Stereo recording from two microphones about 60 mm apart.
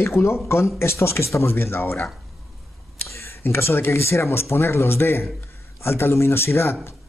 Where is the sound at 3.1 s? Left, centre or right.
Left.